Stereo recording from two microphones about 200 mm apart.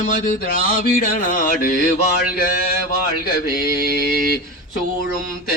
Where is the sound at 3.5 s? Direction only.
50° left (ahead or behind).